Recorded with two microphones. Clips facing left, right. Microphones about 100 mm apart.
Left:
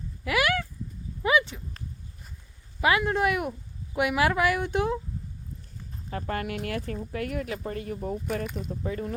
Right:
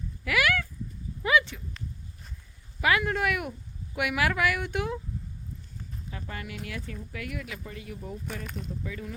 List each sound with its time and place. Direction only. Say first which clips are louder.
0.3 s a sound: left 1 dB; 25° left (ahead or behind)
1.2 s horse: left 1 dB; 25° left (ahead or behind)
2.8 s speech: left 2 dB; 25° left (ahead or behind)
6.1 s speech: left 9 dB; 55° left (ahead or behind)
8.4 s speech: left 4 dB; 10° left (ahead or behind)
8.7 s speech: left 6 dB; 45° left (ahead or behind)